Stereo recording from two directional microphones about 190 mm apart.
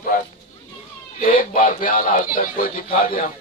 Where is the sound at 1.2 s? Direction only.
45° left (ahead or behind).